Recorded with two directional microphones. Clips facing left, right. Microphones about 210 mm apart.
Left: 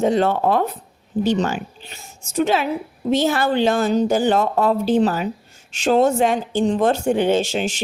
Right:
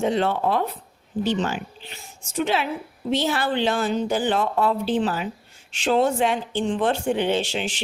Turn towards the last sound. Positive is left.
turn(degrees=45)  # may be behind; listen again after turning